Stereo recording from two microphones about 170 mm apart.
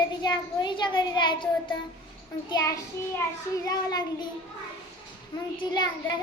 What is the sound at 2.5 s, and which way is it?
A child's voice, 20° left (ahead or behind).